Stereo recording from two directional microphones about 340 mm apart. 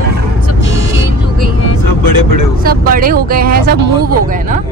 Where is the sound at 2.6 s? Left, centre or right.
Right.